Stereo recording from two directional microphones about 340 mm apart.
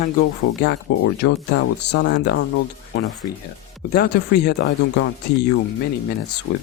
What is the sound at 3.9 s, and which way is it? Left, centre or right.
Speech, left.